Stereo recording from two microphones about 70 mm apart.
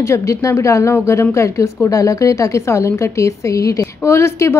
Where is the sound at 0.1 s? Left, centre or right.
Left.